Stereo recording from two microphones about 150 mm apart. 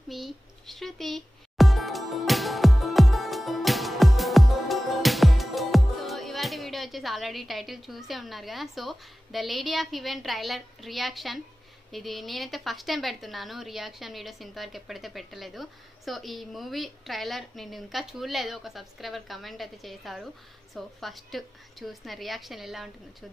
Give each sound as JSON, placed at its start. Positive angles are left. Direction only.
{"t": 0.1, "sound": "music", "side_deg": 0}
{"t": 11.9, "sound": "a woman's voice", "side_deg": 0}